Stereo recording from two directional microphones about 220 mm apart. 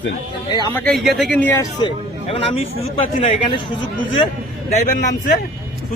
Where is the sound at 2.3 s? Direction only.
25° left (ahead or behind).